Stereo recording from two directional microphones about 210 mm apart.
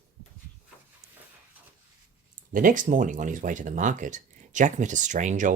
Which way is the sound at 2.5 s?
40° right (ahead or behind).